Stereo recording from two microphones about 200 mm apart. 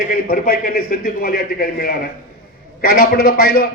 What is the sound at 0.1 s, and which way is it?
A man's voice, 45° left (ahead or behind).